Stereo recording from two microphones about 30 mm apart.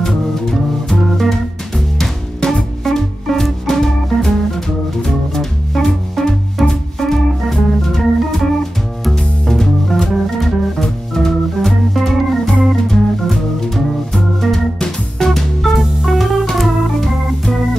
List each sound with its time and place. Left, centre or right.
0.0 s music: centre
2.8 s music: centre
6.7 s organ: centre
9.1 s music: centre
10.8 s organ: centre
14.8 s music: centre
15.3 s music: centre
16.5 s organ: centre